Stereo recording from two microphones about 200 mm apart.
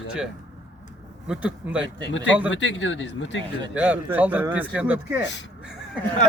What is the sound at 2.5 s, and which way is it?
Speech, 70° left (ahead or behind).